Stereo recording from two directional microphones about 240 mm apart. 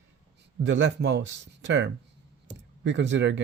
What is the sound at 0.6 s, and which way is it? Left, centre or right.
Speech, right.